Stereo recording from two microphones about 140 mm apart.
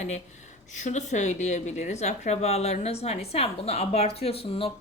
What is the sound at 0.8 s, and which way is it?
Speech, 55° left (ahead or behind).